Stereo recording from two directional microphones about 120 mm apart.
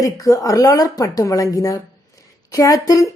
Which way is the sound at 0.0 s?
30° left (ahead or behind).